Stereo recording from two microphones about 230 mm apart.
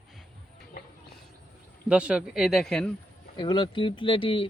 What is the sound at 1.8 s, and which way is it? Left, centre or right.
Speech, centre.